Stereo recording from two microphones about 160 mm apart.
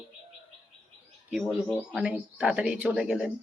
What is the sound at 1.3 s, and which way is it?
Speech, centre (ahead or behind).